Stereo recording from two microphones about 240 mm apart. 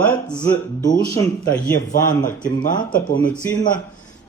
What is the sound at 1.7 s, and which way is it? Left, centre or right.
Speech, left.